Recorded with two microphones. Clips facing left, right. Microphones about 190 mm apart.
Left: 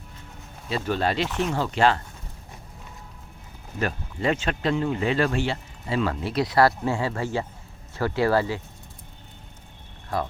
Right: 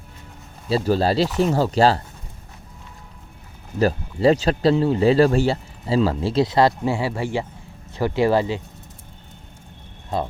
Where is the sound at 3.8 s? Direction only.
35° right (ahead or behind); by 8.6 s 20° right (ahead or behind).